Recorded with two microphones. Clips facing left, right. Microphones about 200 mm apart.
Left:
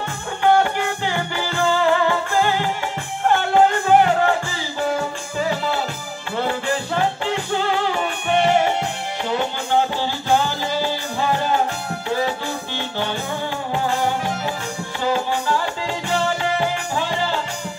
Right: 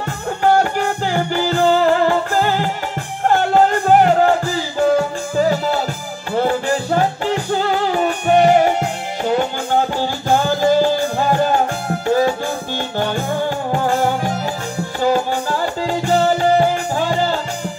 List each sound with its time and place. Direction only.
0.4 s music: 40° right (ahead or behind)